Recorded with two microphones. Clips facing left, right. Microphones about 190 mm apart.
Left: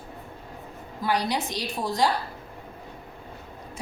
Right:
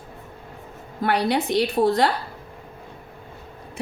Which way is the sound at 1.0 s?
60° right (ahead or behind).